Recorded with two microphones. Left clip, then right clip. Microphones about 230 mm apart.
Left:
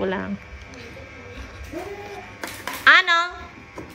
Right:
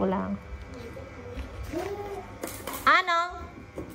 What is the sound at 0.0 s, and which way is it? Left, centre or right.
Speech, left.